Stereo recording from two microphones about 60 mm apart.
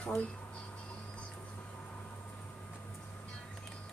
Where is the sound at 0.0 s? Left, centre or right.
Left.